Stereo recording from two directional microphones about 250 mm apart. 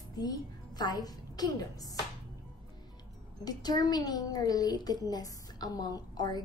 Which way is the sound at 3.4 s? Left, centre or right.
Centre.